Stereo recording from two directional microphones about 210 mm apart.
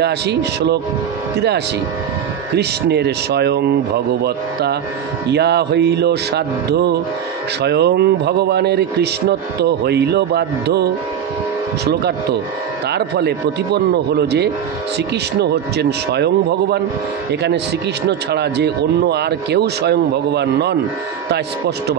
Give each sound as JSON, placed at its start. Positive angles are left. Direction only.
{"t": 0.0, "sound": "speech", "side_deg": -50}
{"t": 2.5, "sound": "speech", "side_deg": -50}
{"t": 15.8, "sound": "speech", "side_deg": -50}